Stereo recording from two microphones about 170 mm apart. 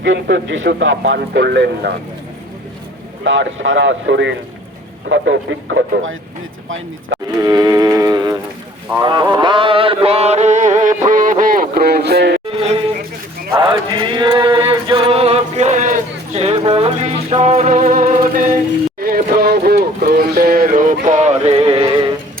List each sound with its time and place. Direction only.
0.0 s speech: 90° right; by 2.0 s 70° right (ahead or behind)
3.2 s speech: 90° right
7.3 s music: 20° right (ahead or behind); by 12.4 s 75° right (ahead or behind)
12.5 s a sound: 35° right (ahead or behind)
13.6 s mantra: 30° right (ahead or behind); by 18.6 s 50° right (ahead or behind)
18.9 s music: 60° right (ahead or behind); by 22.1 s 25° right (ahead or behind)